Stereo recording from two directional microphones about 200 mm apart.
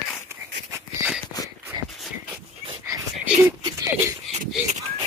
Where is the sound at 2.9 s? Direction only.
15° right (ahead or behind).